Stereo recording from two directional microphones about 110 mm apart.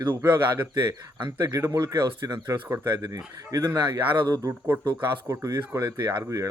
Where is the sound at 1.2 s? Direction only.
40° right (ahead or behind).